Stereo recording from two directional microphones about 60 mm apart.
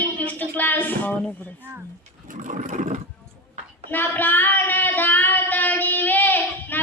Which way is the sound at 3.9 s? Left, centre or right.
Left.